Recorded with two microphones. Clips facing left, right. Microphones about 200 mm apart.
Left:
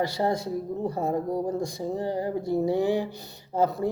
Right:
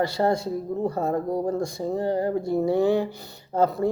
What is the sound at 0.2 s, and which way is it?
Speech, 60° right (ahead or behind).